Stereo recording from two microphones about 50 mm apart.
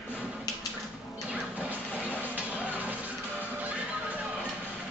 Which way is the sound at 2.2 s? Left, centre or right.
Right.